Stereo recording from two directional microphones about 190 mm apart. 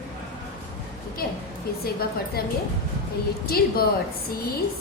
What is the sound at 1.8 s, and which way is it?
Speech, 55° left (ahead or behind).